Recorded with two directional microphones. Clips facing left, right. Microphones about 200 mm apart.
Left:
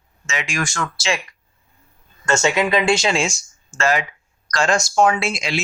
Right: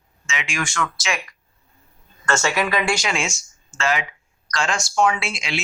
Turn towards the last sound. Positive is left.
turn(degrees=40)  # may be behind; listen again after turning